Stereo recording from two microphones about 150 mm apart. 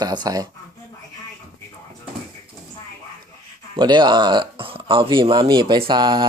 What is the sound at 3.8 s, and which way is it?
Speech, 30° right (ahead or behind).